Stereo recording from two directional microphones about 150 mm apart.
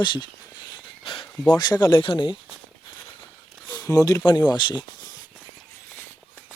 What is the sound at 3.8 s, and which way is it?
Speech, 25° left (ahead or behind).